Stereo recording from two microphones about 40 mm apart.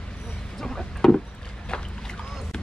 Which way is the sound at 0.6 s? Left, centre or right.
Centre.